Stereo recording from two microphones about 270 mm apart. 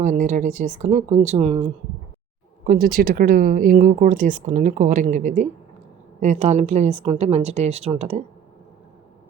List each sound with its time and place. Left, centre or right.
0.0 s speech: right
2.6 s speech: right